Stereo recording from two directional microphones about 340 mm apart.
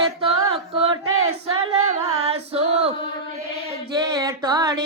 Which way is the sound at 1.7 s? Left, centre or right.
Centre.